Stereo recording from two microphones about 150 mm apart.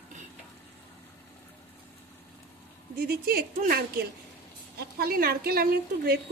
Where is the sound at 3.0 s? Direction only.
85° right.